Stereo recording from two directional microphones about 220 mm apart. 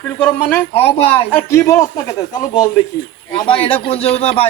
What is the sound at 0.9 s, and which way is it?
Speech, 25° left (ahead or behind).